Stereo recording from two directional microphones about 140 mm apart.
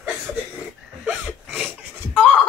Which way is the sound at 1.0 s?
10° right (ahead or behind).